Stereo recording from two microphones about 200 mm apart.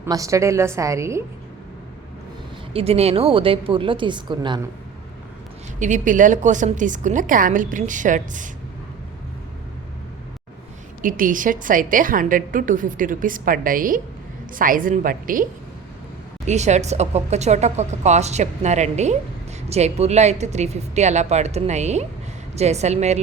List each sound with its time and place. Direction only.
0.0 s a woman's voice: 15° right (ahead or behind)
2.7 s a woman's voice: 30° right (ahead or behind)
5.8 s a woman's voice: 40° right (ahead or behind)
11.0 s a woman's voice: 45° right (ahead or behind)
16.5 s a woman's voice: 35° right (ahead or behind)